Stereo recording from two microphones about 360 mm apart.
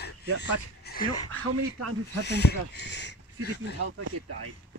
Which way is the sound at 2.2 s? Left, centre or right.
Left.